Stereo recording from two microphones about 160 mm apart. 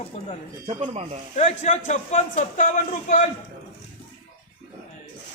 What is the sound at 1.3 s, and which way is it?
A man's voice, 45° left (ahead or behind).